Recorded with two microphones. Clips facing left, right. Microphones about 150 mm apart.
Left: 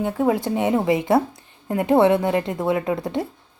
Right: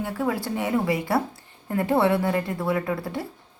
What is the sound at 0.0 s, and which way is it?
Speech, 20° left (ahead or behind).